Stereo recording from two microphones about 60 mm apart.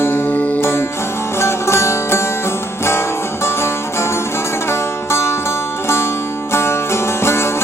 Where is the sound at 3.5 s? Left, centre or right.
Left.